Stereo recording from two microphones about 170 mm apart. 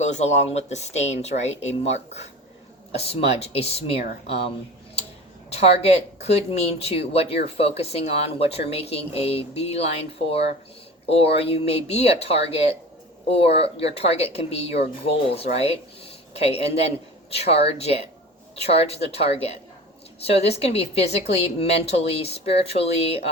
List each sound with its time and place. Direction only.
0.0 s speech: 40° left (ahead or behind)
5.5 s speech: 35° left (ahead or behind)